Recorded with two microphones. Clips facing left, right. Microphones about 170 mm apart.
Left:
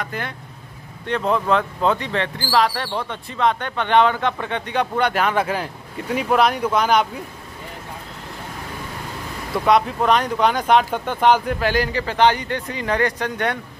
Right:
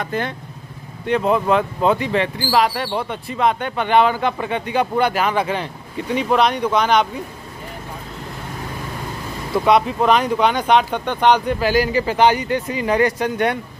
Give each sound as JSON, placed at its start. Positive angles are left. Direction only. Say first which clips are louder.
{"t": 0.0, "sound": "speech", "louder": "right 5 dB", "side_deg": -25}
{"t": 1.0, "sound": "speech", "louder": "right 3 dB", "side_deg": -10}
{"t": 9.7, "sound": "speech", "louder": "right 1 dB", "side_deg": 0}